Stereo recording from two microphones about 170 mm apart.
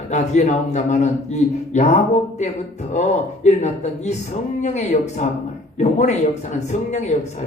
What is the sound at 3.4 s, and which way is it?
A man's voice, 45° left (ahead or behind).